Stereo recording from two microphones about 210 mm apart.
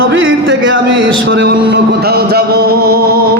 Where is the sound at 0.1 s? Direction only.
65° right (ahead or behind).